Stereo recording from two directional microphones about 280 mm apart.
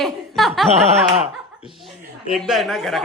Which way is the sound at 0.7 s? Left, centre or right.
Right.